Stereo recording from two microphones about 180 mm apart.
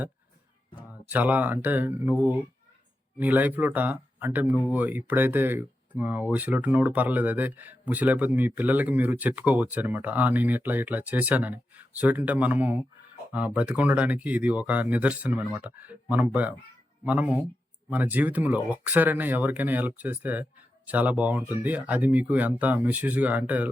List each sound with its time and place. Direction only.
1.0 s speech: 10° right (ahead or behind)